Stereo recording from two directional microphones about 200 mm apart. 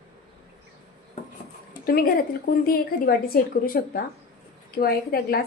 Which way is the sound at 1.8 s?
45° left (ahead or behind).